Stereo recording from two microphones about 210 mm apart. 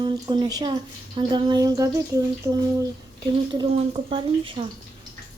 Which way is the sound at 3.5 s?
25° right (ahead or behind).